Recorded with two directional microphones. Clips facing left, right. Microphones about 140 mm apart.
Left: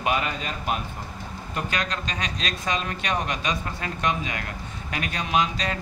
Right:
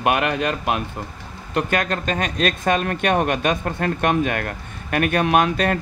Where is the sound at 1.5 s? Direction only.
50° right (ahead or behind).